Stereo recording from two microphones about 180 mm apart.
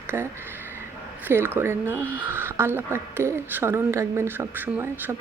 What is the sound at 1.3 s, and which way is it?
A woman's voice, 15° right (ahead or behind).